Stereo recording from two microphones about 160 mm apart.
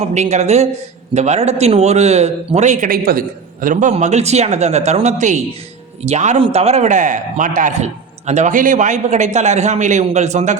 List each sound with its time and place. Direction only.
0.1 s a man's voice: 45° right (ahead or behind)